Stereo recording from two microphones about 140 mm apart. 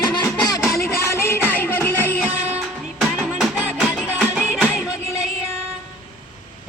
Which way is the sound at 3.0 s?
5° right (ahead or behind).